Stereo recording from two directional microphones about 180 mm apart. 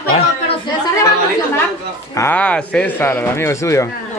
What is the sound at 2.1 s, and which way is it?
A man's voice, 10° left (ahead or behind).